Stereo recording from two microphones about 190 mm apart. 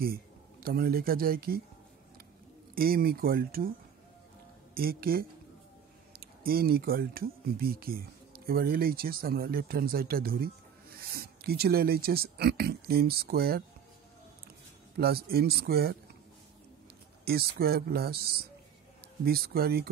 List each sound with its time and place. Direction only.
0.0 s speech: 50° right (ahead or behind)
2.7 s speech: 50° right (ahead or behind)
4.7 s speech: 50° right (ahead or behind)
15.0 s speech: 55° right (ahead or behind)
17.2 s speech: 55° right (ahead or behind)